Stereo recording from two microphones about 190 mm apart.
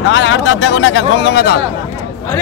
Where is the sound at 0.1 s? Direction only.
80° left; by 1.6 s 60° left (ahead or behind).